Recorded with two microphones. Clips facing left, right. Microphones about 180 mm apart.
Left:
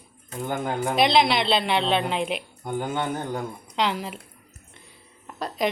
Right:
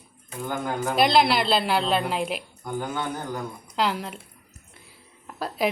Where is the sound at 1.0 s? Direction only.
Centre (ahead or behind).